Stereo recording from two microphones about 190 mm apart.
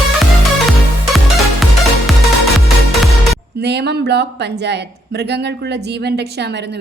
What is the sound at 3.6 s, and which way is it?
A woman's voice, 65° right (ahead or behind).